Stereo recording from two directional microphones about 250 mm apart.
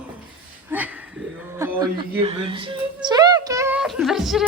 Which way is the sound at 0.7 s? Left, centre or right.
Centre.